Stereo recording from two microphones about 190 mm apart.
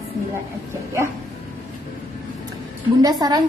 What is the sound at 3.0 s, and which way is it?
Speech, 20° right (ahead or behind).